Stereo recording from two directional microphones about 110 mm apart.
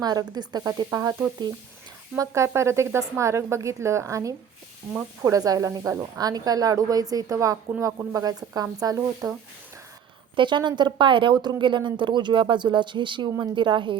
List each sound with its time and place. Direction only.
0.0 s a woman's voice: 35° right (ahead or behind)
2.1 s a woman's voice: 25° right (ahead or behind)
6.1 s a woman's voice: 35° right (ahead or behind)
10.3 s a woman's voice: 45° right (ahead or behind)